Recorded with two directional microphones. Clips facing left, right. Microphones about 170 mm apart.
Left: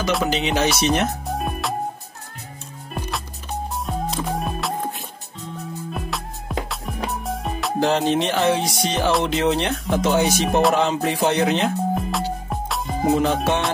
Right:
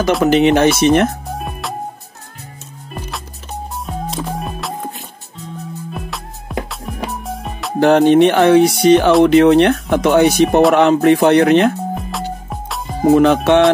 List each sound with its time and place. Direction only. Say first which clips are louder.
0.2 s speech: right 10 dB; 55° right (ahead or behind)
1.4 s music: left 1 dB; centre (ahead or behind)
3.8 s music: right 3 dB; centre (ahead or behind)
7.8 s speech: right 11 dB; 60° right (ahead or behind)
11.9 s music: even; centre (ahead or behind)
13.1 s music: right 9 dB; 70° right (ahead or behind)